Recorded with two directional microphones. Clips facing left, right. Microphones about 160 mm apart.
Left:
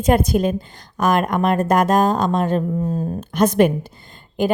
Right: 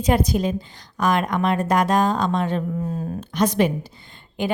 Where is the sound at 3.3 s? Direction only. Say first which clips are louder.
Left 4 dB; 50° left (ahead or behind).